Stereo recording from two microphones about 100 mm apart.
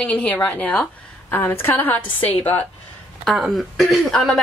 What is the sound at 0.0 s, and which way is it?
A woman's voice, 10° left (ahead or behind).